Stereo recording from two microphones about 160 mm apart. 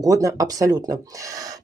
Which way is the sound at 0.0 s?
20° right (ahead or behind).